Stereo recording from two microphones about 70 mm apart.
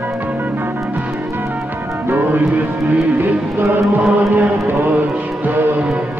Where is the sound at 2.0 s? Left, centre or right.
Right.